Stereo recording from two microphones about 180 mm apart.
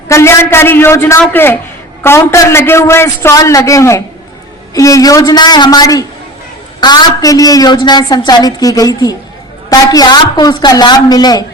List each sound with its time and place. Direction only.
0.1 s a man's voice: 15° left (ahead or behind)